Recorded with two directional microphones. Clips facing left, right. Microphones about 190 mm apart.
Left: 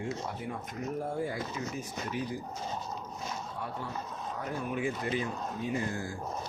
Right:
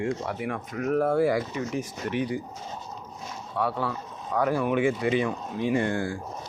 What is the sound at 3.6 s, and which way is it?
Speech, 85° right.